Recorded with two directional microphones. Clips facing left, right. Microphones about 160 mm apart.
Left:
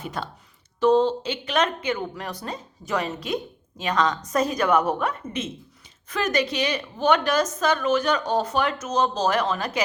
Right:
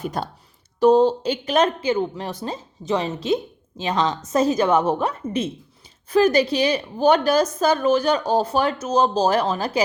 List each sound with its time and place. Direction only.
0.0 s a woman's voice: 40° right (ahead or behind)